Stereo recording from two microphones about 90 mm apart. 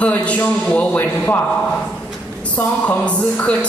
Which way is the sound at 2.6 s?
15° left (ahead or behind).